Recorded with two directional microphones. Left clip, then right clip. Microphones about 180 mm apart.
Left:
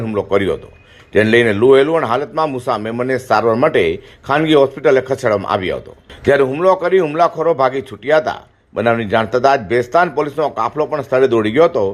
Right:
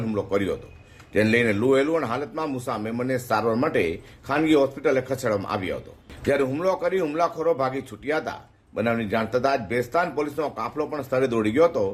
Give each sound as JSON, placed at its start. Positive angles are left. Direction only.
{"t": 0.0, "sound": "a man's voice", "side_deg": 25}